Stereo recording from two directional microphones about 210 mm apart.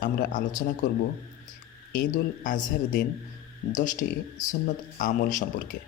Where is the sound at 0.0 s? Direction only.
40° left (ahead or behind).